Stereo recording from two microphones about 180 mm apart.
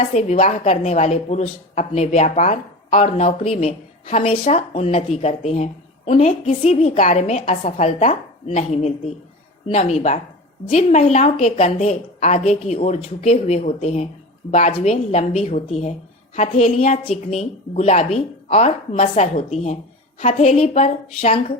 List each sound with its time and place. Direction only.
0.1 s a woman's voice: 35° left (ahead or behind)